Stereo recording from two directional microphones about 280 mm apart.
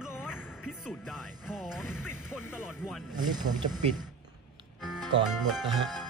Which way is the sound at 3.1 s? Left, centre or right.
Centre.